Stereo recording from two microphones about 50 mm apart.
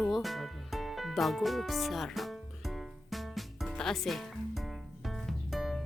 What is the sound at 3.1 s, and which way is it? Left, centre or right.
Music, centre.